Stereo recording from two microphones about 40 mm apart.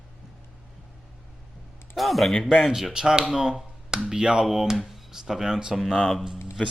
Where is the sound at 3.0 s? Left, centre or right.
Centre.